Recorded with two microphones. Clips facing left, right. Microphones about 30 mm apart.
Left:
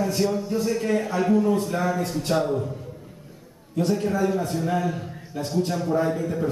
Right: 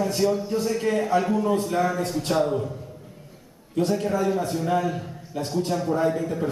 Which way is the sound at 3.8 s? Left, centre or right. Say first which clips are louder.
Left 1 dB; centre.